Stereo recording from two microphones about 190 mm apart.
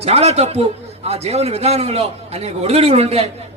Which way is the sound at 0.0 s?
35° right (ahead or behind).